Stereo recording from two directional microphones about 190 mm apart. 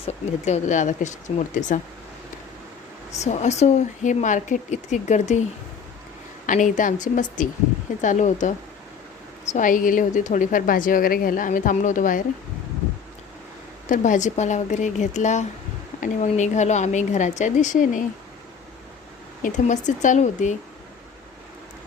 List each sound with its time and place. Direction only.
0.0 s a woman's voice: 35° left (ahead or behind)
3.2 s a woman's voice: 40° left (ahead or behind)
6.4 s a woman's voice: 45° left (ahead or behind)
13.8 s a woman's voice: 40° left (ahead or behind)
19.4 s a woman's voice: 40° left (ahead or behind)